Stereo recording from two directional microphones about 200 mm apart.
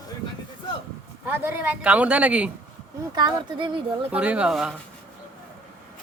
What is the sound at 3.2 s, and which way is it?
Speech, 25° right (ahead or behind).